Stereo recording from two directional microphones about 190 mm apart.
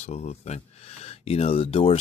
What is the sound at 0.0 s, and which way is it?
Speech, 35° left (ahead or behind).